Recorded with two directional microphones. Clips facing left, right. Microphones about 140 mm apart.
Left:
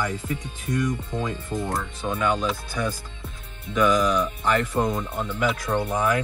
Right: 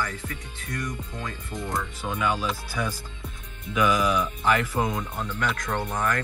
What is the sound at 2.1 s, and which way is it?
Speech, centre (ahead or behind).